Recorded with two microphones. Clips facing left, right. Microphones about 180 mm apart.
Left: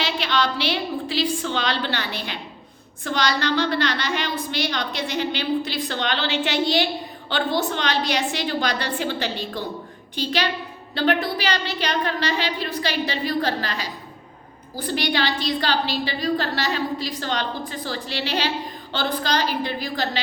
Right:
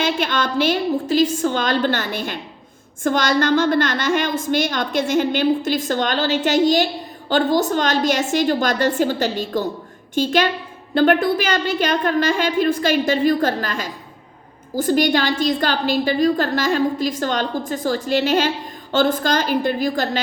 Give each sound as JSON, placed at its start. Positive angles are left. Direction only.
{"t": 0.0, "sound": "a woman's voice", "side_deg": -50}